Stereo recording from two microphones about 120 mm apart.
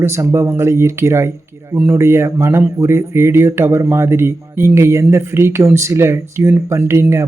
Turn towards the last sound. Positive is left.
turn(degrees=-25)  # may be behind; listen again after turning